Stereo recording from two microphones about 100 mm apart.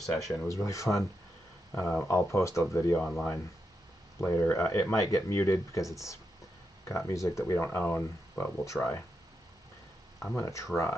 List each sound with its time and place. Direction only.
0.0 s speech: centre (ahead or behind)
0.5 s speech: 30° left (ahead or behind)
3.0 s speech: 5° left (ahead or behind)
4.2 s speech: 30° left (ahead or behind)
10.3 s speech: 30° left (ahead or behind)